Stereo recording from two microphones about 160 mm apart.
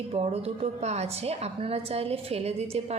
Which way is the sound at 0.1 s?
40° right (ahead or behind).